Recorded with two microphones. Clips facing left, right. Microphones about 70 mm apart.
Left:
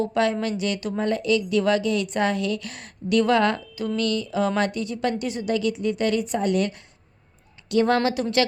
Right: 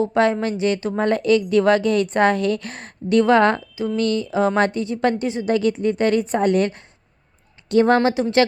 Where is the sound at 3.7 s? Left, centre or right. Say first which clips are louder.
Right 4 dB; right.